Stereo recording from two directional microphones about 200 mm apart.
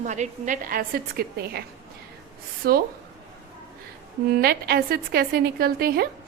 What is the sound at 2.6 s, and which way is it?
Speech, 50° right (ahead or behind).